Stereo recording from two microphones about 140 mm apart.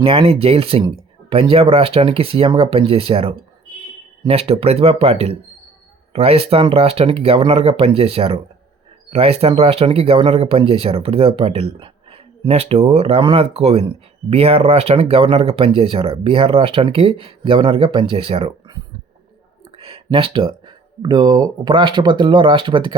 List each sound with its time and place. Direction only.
0.0 s speech: 45° right (ahead or behind)
19.7 s speech: 40° right (ahead or behind)